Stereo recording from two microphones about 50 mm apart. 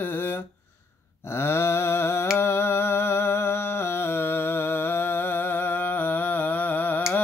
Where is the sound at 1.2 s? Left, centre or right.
Left.